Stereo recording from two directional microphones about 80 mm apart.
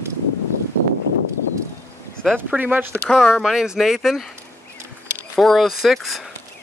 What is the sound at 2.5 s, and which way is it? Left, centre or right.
Speech, right.